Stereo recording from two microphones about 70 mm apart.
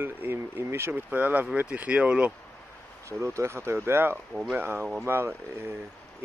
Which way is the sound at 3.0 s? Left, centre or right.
Right.